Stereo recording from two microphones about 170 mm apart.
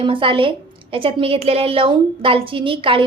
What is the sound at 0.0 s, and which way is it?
A woman's voice, 30° right (ahead or behind).